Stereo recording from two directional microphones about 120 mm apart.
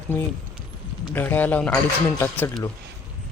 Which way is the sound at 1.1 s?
15° left (ahead or behind).